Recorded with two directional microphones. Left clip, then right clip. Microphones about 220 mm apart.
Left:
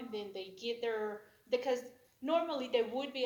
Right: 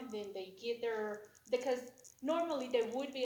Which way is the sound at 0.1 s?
40° left (ahead or behind).